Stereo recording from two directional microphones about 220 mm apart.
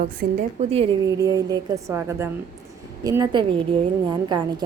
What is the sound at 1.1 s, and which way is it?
A woman's voice, 15° right (ahead or behind).